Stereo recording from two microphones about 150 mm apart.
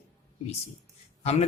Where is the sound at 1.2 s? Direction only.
45° left (ahead or behind).